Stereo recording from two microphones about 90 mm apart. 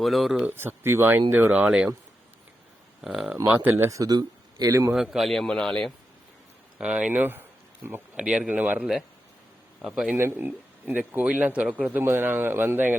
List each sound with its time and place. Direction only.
0.0 s a man's voice: centre (ahead or behind)
0.4 s a man's voice: 25° right (ahead or behind)
3.0 s a man's voice: 5° right (ahead or behind)
3.7 s speech: 35° right (ahead or behind)
4.9 s a man's voice: 5° right (ahead or behind)
6.7 s speech: 10° right (ahead or behind)
8.1 s speech: 10° right (ahead or behind)
10.2 s a man's voice: 25° right (ahead or behind)